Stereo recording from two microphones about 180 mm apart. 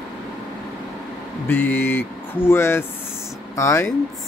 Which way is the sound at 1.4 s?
10° left (ahead or behind).